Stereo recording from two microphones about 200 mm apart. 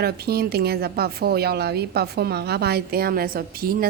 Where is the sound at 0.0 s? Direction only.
50° right (ahead or behind).